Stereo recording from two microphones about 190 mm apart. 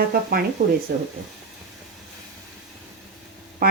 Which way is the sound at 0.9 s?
55° right (ahead or behind).